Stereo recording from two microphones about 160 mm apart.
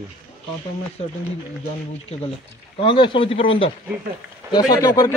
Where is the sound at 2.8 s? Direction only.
30° left (ahead or behind).